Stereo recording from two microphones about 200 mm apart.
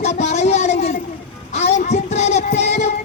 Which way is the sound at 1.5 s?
35° left (ahead or behind).